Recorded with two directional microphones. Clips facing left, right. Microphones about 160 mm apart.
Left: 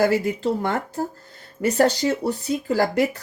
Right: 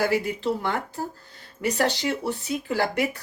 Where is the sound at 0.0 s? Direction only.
40° left (ahead or behind).